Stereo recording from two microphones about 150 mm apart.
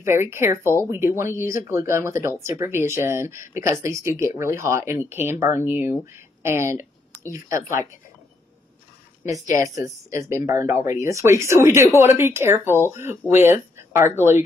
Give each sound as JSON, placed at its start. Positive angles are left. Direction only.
{"t": 0.0, "sound": "a woman's voice", "side_deg": -15}
{"t": 9.8, "sound": "speech", "side_deg": -20}